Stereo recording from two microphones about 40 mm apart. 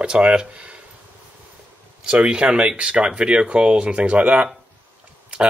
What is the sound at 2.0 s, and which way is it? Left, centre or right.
Speech, right.